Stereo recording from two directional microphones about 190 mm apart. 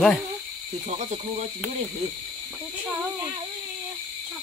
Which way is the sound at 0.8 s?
35° right (ahead or behind).